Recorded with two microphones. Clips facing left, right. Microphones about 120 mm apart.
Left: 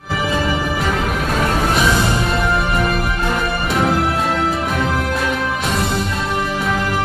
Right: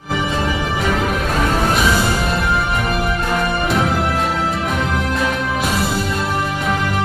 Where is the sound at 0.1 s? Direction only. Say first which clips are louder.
Left 1 dB; centre (ahead or behind).